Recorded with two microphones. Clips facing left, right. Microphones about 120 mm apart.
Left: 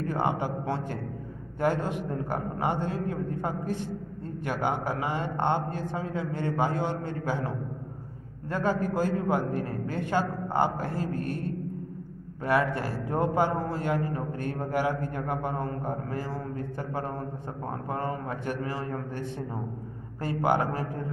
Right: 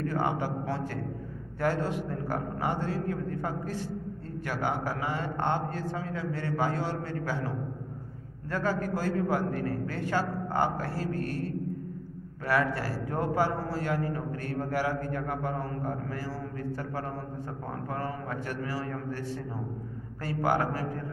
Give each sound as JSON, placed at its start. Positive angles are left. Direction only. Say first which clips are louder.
{"t": 0.1, "sound": "a man's voice", "louder": "left 1 dB", "side_deg": 20}
{"t": 8.5, "sound": "a man's voice", "louder": "left 2 dB", "side_deg": 20}
{"t": 12.4, "sound": "a man's voice", "louder": "left 2 dB", "side_deg": 20}
{"t": 17.8, "sound": "a man's voice", "louder": "left 3 dB", "side_deg": 20}
{"t": 20.2, "sound": "a man's voice", "louder": "left 2 dB", "side_deg": 20}